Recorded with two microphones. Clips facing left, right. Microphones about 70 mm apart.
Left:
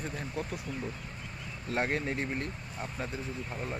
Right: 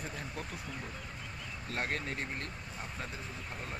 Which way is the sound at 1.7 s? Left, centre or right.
Left.